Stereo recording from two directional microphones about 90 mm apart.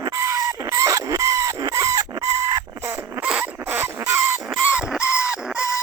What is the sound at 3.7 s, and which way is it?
Chicken, 25° right (ahead or behind).